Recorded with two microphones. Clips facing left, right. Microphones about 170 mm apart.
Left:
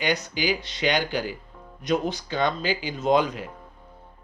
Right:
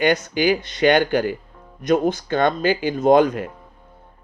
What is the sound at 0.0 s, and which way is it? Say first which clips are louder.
Speech: right 8 dB; 55° right (ahead or behind).